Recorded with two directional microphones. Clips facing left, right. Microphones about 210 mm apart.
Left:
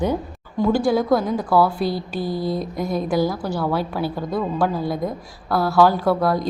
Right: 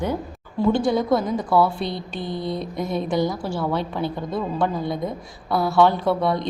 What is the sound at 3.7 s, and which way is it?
A woman's voice, 5° left (ahead or behind).